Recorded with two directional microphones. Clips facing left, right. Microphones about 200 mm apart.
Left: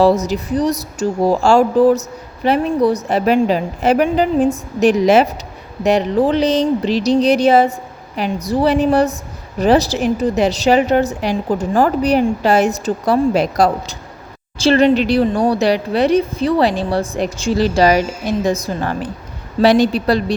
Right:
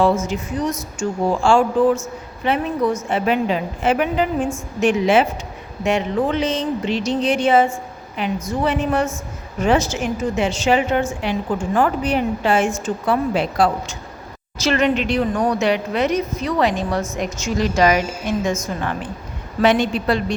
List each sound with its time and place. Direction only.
0.0 s speech: 35° left (ahead or behind)